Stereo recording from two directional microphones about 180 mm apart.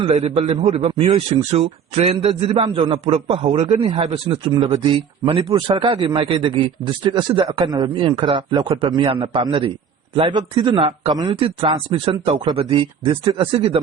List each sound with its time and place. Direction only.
0.0 s a man's voice: 35° right (ahead or behind)